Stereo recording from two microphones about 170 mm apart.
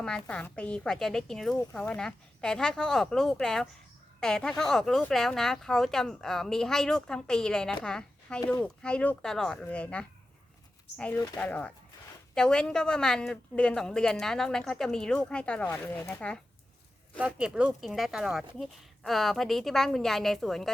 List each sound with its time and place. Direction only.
0.3 s speech: 5° left (ahead or behind)
11.3 s speech: 10° left (ahead or behind)
17.2 s speech: 5° right (ahead or behind)